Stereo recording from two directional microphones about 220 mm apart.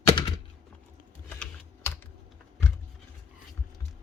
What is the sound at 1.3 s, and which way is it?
Typing, 10° left (ahead or behind).